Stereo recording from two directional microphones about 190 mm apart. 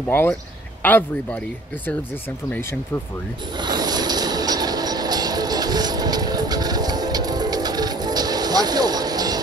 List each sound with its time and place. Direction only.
0.1 s speech: 10° left (ahead or behind)
3.5 s train: 20° right (ahead or behind)